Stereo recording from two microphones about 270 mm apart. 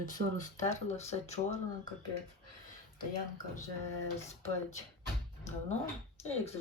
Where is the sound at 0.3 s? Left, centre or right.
Left.